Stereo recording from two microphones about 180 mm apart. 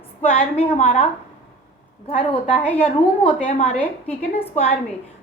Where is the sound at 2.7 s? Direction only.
35° left (ahead or behind).